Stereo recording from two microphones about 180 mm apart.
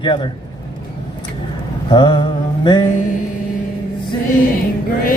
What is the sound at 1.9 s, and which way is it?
Mantra, 25° left (ahead or behind).